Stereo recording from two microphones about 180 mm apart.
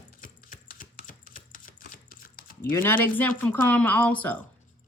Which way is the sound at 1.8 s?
50° left (ahead or behind).